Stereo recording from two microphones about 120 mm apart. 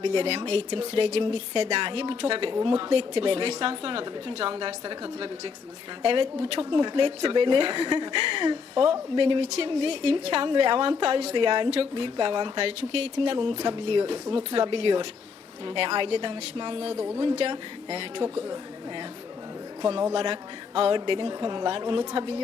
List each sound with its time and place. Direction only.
0.0 s speech: 55° right (ahead or behind)
11.3 s speech: 45° right (ahead or behind)
19.8 s speech: 50° right (ahead or behind)